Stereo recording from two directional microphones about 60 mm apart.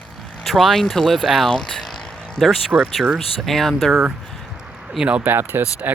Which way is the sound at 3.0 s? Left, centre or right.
Centre.